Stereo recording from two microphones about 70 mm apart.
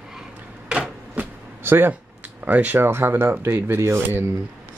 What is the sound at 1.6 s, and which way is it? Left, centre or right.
Speech, right.